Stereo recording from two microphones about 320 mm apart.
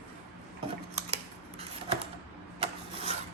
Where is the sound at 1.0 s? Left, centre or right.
Centre.